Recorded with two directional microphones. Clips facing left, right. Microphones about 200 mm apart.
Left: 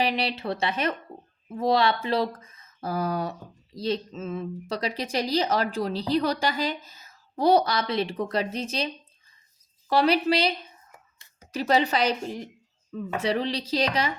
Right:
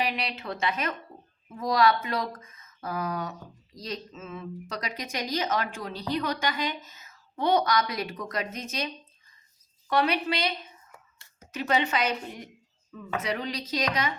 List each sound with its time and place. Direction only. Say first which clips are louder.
0.0 s a woman's voice: left 4 dB; 30° left (ahead or behind)
9.9 s a woman's voice: left 4 dB; 35° left (ahead or behind)
11.5 s a woman's voice: left 4 dB; 35° left (ahead or behind)